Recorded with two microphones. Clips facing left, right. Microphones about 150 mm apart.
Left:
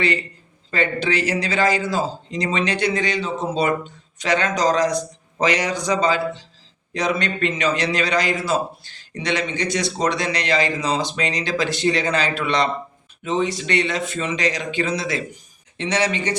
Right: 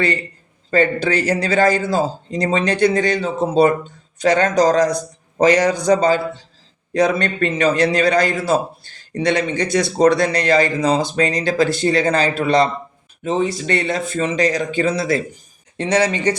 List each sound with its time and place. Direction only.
0.7 s a man's voice: 40° right (ahead or behind)